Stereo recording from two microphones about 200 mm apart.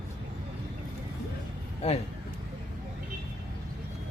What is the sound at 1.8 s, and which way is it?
Speech, 30° left (ahead or behind).